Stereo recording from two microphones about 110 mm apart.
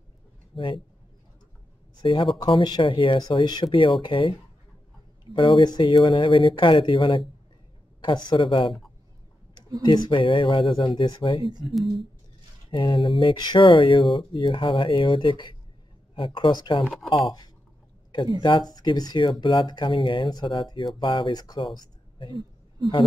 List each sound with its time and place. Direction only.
0.5 s a man's voice: centre (ahead or behind)
2.0 s speech: 45° left (ahead or behind)
8.3 s speech: 50° left (ahead or behind)
9.8 s speech: 40° left (ahead or behind)
11.6 s speech: centre (ahead or behind)
12.7 s speech: 45° left (ahead or behind)
18.4 s speech: 45° left (ahead or behind)